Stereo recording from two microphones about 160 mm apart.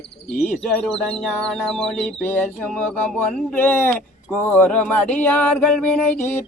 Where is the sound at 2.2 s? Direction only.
10° left (ahead or behind).